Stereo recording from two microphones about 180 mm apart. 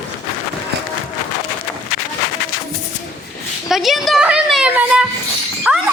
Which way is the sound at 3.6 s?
Centre (ahead or behind).